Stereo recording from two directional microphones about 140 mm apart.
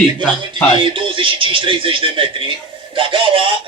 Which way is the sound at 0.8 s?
35° right (ahead or behind).